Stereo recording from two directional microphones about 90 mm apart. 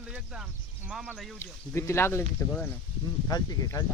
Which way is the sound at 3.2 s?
45° left (ahead or behind).